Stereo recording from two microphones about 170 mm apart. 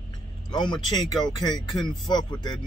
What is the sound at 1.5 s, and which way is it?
Speech, centre (ahead or behind).